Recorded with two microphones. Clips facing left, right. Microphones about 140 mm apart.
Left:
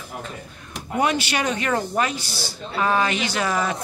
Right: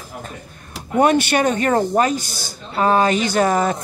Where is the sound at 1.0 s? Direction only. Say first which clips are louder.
Right 7 dB; 50° right (ahead or behind).